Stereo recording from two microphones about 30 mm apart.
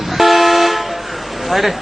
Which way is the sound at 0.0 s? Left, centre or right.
Centre.